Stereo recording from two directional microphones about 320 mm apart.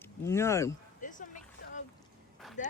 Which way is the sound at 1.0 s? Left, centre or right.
Left.